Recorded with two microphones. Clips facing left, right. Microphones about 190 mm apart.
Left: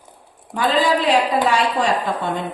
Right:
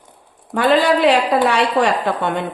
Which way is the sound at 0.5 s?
65° right (ahead or behind).